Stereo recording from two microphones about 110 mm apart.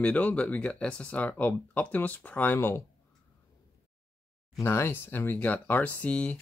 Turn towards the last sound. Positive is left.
turn(degrees=10)  # may be behind; listen again after turning